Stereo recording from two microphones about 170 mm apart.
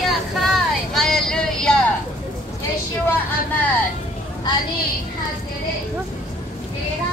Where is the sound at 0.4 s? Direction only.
Centre (ahead or behind).